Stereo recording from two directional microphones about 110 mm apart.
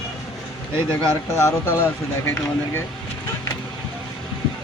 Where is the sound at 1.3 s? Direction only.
25° left (ahead or behind).